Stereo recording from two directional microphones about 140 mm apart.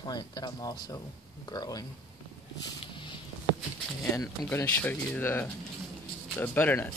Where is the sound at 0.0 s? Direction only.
30° left (ahead or behind).